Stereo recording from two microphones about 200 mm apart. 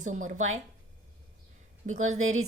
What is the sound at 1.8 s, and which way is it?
Speech, 35° right (ahead or behind).